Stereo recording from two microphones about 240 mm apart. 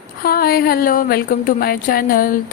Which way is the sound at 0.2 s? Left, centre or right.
Left.